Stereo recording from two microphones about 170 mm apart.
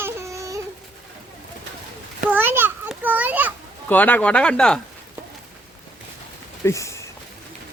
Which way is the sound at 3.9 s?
10° left (ahead or behind).